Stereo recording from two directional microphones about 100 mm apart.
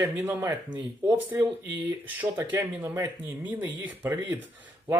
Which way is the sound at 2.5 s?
30° right (ahead or behind).